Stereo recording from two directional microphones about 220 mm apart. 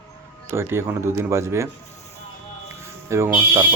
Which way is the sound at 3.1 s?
15° right (ahead or behind).